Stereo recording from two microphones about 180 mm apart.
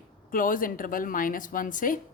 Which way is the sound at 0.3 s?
50° left (ahead or behind).